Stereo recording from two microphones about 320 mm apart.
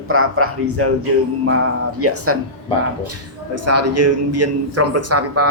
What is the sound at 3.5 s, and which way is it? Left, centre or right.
A man's voice, right.